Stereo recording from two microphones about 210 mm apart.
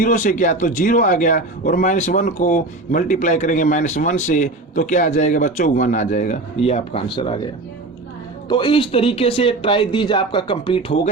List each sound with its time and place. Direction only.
0.0 s a man's voice: 35° left (ahead or behind)
8.4 s speech: 20° left (ahead or behind)